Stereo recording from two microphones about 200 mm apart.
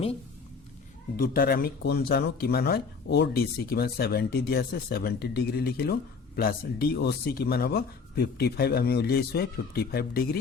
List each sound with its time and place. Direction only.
1.1 s speech: 45° left (ahead or behind)